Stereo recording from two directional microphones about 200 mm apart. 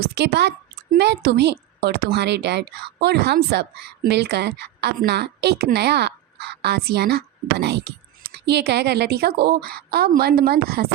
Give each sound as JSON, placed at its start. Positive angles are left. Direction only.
{"t": 0.0, "sound": "a woman's voice", "side_deg": -55}